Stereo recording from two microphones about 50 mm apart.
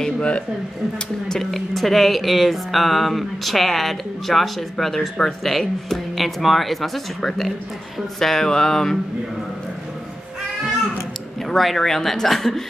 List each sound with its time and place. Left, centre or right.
0.0 s a man's voice: left
1.4 s speech: centre
11.4 s speech: centre